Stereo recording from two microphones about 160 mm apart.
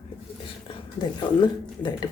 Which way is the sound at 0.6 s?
25° left (ahead or behind).